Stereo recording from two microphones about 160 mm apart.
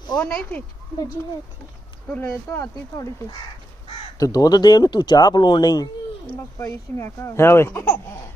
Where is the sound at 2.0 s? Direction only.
15° left (ahead or behind).